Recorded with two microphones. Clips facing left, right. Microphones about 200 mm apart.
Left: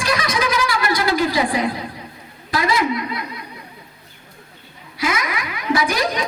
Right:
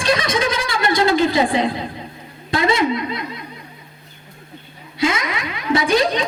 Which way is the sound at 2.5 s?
25° right (ahead or behind).